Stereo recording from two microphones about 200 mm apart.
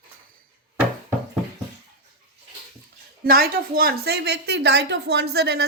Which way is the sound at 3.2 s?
50° right (ahead or behind).